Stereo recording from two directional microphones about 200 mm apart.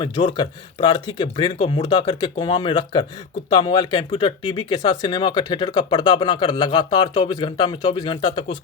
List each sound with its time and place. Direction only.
0.3 s speech: 25° left (ahead or behind)